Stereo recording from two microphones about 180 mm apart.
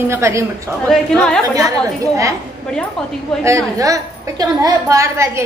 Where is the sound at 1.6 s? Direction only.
15° right (ahead or behind).